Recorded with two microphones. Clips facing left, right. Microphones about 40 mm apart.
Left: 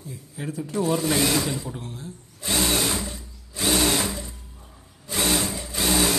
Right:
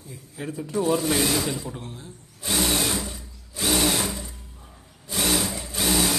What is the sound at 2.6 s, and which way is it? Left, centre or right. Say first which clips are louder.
Sewing machine: even; left.